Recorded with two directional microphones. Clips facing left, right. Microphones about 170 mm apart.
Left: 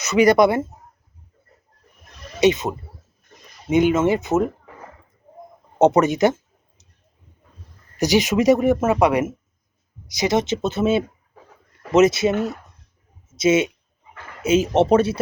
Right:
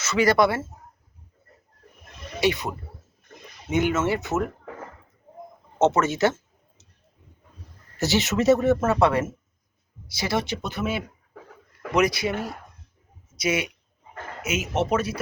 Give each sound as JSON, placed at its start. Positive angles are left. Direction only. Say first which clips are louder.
{"t": 0.0, "sound": "speech", "louder": "left 5 dB", "side_deg": 20}
{"t": 2.4, "sound": "speech", "louder": "left 7 dB", "side_deg": 20}
{"t": 5.8, "sound": "speech", "louder": "left 5 dB", "side_deg": 15}
{"t": 7.9, "sound": "speech", "louder": "left 5 dB", "side_deg": 15}